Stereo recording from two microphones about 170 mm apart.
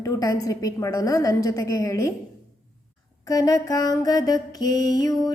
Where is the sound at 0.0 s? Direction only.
20° left (ahead or behind).